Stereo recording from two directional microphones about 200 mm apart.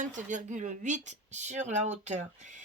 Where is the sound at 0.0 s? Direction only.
40° right (ahead or behind).